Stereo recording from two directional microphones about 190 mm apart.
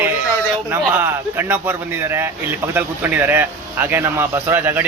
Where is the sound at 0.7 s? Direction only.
10° right (ahead or behind).